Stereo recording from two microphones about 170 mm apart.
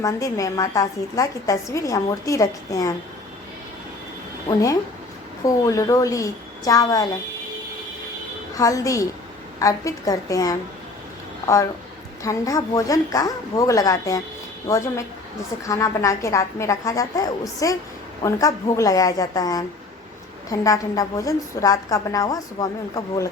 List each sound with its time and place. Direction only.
0.0 s a woman's voice: 20° left (ahead or behind)
4.4 s a woman's voice: 20° left (ahead or behind)
8.5 s a woman's voice: 20° left (ahead or behind)
12.2 s a woman's voice: 20° left (ahead or behind)